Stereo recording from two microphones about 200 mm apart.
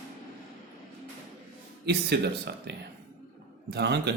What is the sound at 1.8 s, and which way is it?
Speech, 55° right (ahead or behind).